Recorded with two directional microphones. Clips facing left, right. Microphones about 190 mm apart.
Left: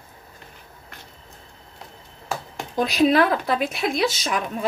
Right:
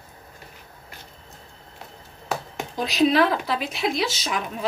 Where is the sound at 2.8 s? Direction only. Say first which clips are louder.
Left 1 dB; 50° left (ahead or behind).